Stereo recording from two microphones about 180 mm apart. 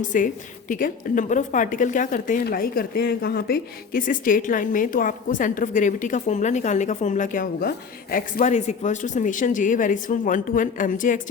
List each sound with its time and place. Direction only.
0.1 s speech: 45° left (ahead or behind)